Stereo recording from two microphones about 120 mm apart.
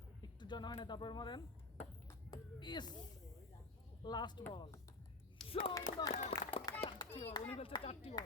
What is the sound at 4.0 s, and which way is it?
Speech, 35° left (ahead or behind).